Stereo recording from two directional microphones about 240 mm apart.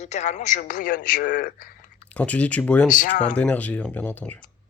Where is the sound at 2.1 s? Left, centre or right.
Centre.